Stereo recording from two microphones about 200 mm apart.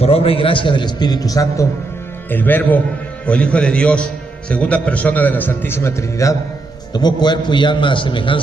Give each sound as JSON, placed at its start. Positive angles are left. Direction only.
{"t": 0.0, "sound": "a man's voice", "side_deg": 30}